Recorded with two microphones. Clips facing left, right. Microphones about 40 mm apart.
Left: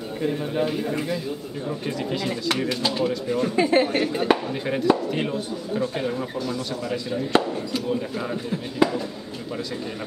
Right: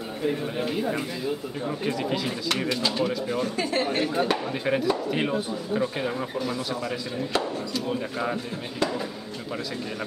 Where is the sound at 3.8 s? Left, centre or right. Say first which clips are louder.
Left 3 dB; centre.